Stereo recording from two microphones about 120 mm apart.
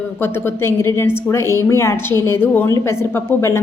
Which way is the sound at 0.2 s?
20° left (ahead or behind).